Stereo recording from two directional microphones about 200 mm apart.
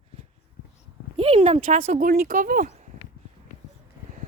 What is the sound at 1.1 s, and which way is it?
Speech, 30° right (ahead or behind).